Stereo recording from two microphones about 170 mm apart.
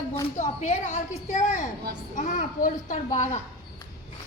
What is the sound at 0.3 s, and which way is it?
A woman's voice, 45° left (ahead or behind).